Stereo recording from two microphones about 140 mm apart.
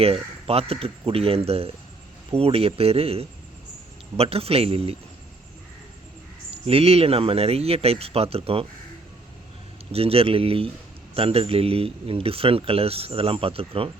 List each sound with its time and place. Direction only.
0.0 s speech: 45° right (ahead or behind)
6.7 s speech: 45° right (ahead or behind)
9.9 s speech: 45° right (ahead or behind)